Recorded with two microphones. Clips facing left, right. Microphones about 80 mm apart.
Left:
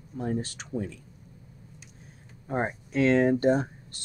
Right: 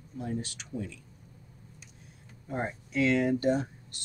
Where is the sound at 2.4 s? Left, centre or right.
Left.